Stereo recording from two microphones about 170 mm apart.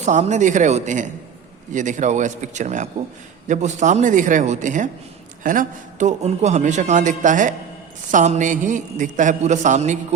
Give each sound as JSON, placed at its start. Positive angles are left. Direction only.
{"t": 0.0, "sound": "a man's voice", "side_deg": -45}